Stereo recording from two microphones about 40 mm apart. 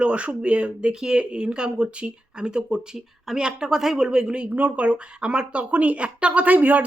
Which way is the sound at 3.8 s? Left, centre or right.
Centre.